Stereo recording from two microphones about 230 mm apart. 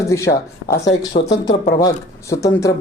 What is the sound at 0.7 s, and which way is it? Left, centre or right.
Speech, left.